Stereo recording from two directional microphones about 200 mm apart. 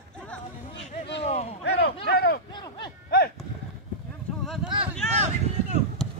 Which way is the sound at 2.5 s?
20° left (ahead or behind).